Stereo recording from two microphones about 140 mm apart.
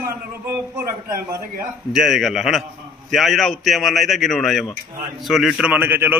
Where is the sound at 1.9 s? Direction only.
Centre (ahead or behind).